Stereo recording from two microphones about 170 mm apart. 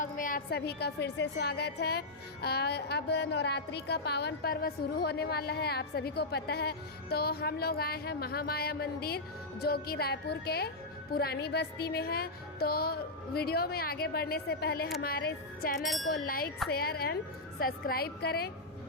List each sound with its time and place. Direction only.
0.0 s a woman's voice: 55° left (ahead or behind)
15.8 s wind chime: centre (ahead or behind)
16.1 s a woman's voice: 60° left (ahead or behind)